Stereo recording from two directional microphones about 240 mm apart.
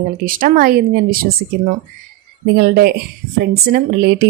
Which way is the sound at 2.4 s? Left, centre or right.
Right.